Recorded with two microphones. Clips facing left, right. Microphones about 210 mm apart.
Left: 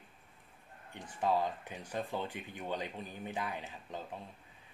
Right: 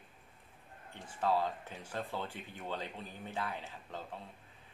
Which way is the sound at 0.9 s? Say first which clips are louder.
Left 1 dB; 15° left (ahead or behind).